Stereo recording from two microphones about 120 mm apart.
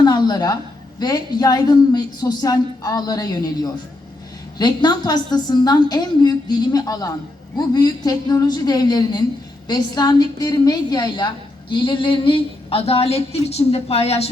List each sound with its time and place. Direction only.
0.0 s a woman's voice: 35° left (ahead or behind); by 14.3 s 55° left (ahead or behind)